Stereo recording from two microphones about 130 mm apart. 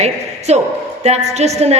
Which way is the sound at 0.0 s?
55° right (ahead or behind).